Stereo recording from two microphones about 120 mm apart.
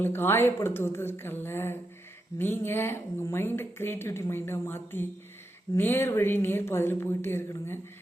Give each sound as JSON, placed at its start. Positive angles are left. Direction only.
{"t": 0.0, "sound": "a woman's voice", "side_deg": 20}